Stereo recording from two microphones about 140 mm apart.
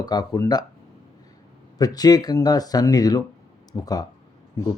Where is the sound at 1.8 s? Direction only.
25° left (ahead or behind).